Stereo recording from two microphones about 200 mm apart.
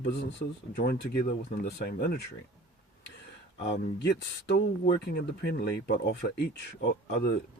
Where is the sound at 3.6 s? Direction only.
60° left (ahead or behind).